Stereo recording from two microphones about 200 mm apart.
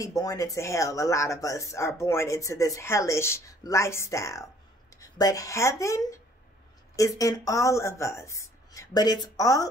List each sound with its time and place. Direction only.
0.0 s speech: 15° left (ahead or behind)